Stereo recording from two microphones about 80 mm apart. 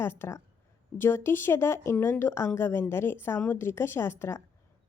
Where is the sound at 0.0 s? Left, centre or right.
Left.